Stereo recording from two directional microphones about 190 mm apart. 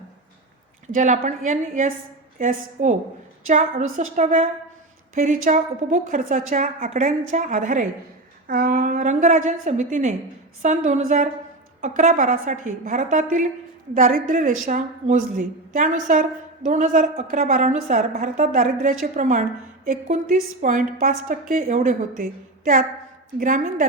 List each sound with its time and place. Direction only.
0.9 s a woman's voice: 40° right (ahead or behind)